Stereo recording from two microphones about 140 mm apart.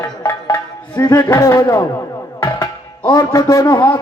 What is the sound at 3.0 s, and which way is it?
Speech, 25° left (ahead or behind).